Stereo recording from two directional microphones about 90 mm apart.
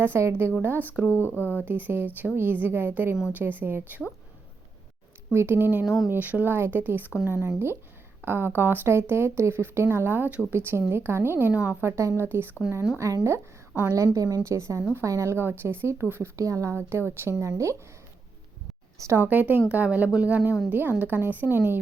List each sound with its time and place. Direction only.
0.0 s speech: 25° right (ahead or behind)
1.4 s speech: 20° left (ahead or behind)
1.6 s speech: 20° right (ahead or behind)
5.3 s speech: 25° right (ahead or behind)
5.8 s speech: centre (ahead or behind)
6.1 s speech: 20° right (ahead or behind)
11.8 s a woman's voice: 30° right (ahead or behind)
16.3 s a woman's voice: 35° right (ahead or behind)
18.9 s a woman's voice: 35° right (ahead or behind)
19.2 s speech: 20° right (ahead or behind)